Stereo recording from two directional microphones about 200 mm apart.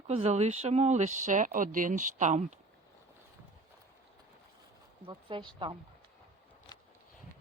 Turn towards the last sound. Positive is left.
turn(degrees=-25)  # may be behind; listen again after turning